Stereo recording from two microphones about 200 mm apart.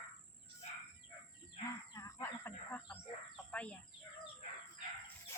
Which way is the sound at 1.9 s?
15° left (ahead or behind).